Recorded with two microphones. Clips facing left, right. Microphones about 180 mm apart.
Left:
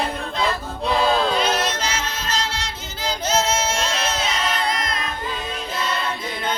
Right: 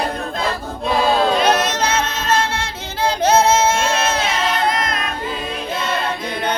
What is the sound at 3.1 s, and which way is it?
Singing, 60° right (ahead or behind).